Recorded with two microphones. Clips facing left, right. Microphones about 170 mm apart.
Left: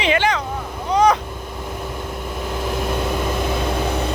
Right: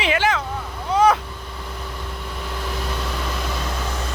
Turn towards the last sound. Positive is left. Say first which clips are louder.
# left 6 dB
turn(degrees=50)  # may be behind; listen again after turning